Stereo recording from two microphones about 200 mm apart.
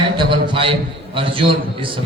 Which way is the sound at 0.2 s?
25° right (ahead or behind).